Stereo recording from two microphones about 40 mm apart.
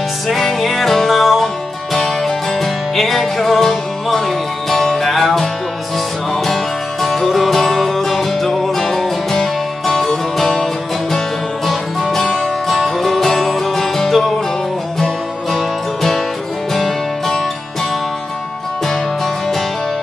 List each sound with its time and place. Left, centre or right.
0.3 s music: centre
6.4 s music: centre
15.5 s music: centre